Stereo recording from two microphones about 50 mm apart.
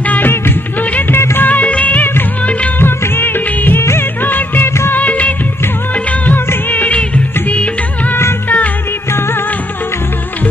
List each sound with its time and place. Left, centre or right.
1.1 s music: left
1.5 s music of bollywood: left
2.8 s music of bollywood: left
7.4 s music: left